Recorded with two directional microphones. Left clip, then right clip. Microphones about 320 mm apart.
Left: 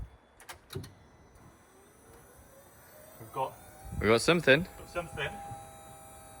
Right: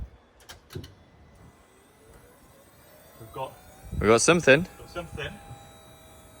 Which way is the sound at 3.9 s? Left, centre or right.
Centre.